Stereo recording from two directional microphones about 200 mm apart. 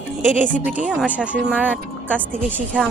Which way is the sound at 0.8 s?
5° right (ahead or behind).